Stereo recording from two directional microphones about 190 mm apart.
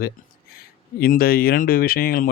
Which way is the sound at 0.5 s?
50° left (ahead or behind).